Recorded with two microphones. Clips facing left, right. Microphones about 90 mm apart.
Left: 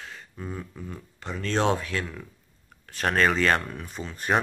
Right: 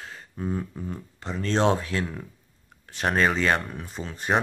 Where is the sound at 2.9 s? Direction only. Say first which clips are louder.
Even; 15° right (ahead or behind).